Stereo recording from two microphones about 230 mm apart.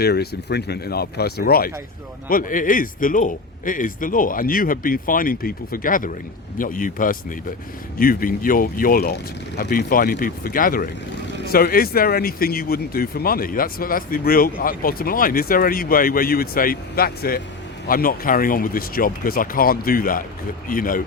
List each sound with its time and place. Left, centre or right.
0.0 s speech: left